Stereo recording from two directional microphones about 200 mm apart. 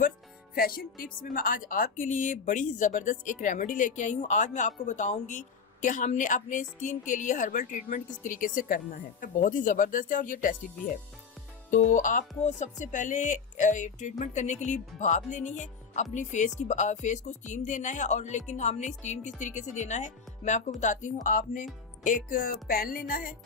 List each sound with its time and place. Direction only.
0.5 s speech: 50° left (ahead or behind)
11.7 s speech: 40° left (ahead or behind)